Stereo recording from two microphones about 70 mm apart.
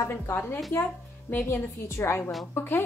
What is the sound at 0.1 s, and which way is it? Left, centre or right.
A woman's voice, left.